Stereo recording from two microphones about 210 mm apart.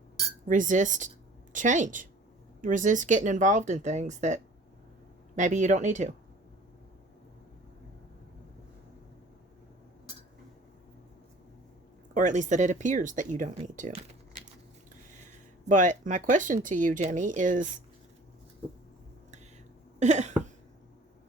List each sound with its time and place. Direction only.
0.4 s speech: 40° right (ahead or behind)
5.4 s speech: 35° right (ahead or behind)
12.1 s speech: 35° right (ahead or behind)
15.7 s speech: 35° right (ahead or behind)
20.0 s speech: 35° right (ahead or behind)